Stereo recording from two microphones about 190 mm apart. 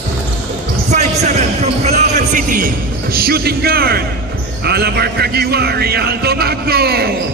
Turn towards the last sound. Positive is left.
turn(degrees=-55)  # may be behind; listen again after turning